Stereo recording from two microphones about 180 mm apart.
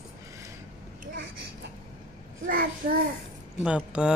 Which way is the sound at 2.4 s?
55° right (ahead or behind).